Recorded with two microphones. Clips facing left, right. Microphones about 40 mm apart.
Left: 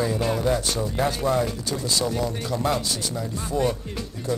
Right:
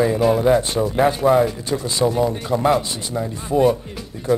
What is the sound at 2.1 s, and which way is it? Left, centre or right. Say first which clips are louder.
A man's voice: right 7 dB; centre.